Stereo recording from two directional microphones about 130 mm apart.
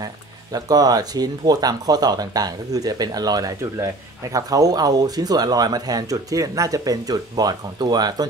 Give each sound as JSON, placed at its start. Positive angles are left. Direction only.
{"t": 0.0, "sound": "speech", "side_deg": -30}